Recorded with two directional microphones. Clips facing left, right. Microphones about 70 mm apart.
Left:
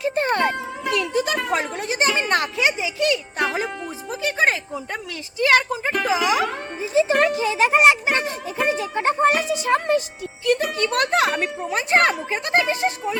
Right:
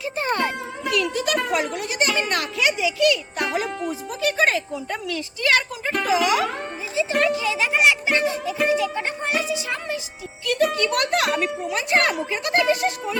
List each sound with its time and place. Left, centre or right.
0.0 s a child's voice: left
6.9 s speech: left
10.4 s a child's voice: left